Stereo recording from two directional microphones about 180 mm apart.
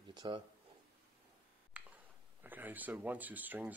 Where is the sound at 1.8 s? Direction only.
5° right (ahead or behind).